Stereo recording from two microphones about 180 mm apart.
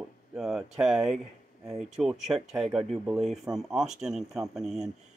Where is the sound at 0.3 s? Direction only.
5° right (ahead or behind).